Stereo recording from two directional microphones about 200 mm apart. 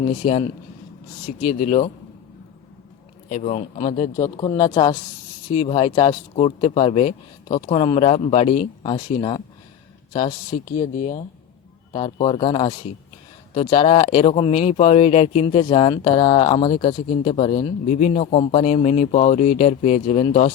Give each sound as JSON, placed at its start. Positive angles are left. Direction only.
{"t": 0.2, "sound": "speech", "side_deg": 30}
{"t": 3.2, "sound": "speech", "side_deg": 35}
{"t": 11.9, "sound": "speech", "side_deg": 25}